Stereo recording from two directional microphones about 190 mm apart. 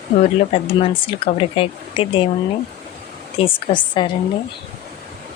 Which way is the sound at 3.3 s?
25° left (ahead or behind).